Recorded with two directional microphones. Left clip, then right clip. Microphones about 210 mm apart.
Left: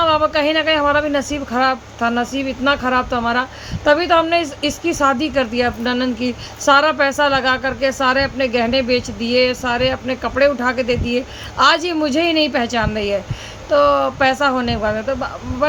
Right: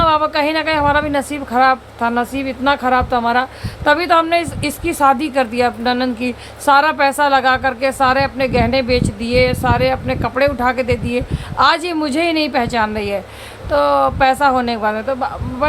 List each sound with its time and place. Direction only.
0.0 s a woman's voice: 15° right (ahead or behind)